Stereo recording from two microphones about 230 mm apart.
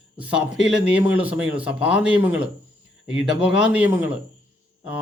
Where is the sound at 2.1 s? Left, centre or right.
Centre.